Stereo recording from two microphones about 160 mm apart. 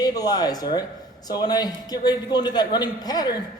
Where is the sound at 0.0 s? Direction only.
25° left (ahead or behind).